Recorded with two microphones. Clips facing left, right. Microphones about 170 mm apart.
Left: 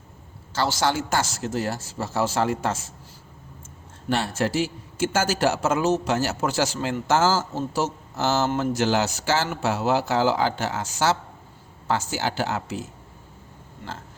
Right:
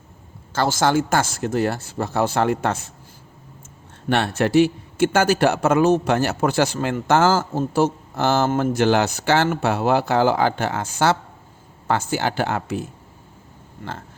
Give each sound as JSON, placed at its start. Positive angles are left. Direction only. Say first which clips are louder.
{"t": 0.5, "sound": "a man's voice", "louder": "right 5 dB", "side_deg": -50}
{"t": 4.1, "sound": "a man's voice", "louder": "right 6 dB", "side_deg": -65}